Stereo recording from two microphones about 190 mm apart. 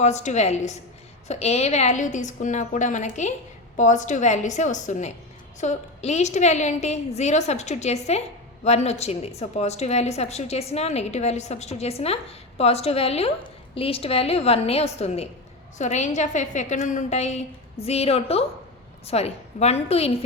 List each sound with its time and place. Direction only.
0.0 s a woman's voice: 35° left (ahead or behind)